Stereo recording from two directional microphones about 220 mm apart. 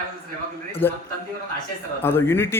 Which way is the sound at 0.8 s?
10° left (ahead or behind).